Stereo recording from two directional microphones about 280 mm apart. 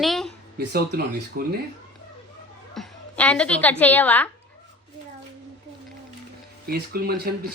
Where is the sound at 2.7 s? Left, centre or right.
Centre.